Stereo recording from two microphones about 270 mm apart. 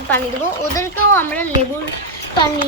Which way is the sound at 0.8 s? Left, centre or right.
Centre.